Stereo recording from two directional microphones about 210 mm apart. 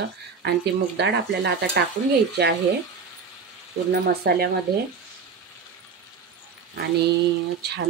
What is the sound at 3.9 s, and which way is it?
Speech, 45° right (ahead or behind).